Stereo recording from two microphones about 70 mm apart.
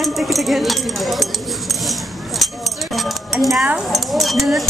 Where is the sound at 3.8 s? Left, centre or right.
Centre.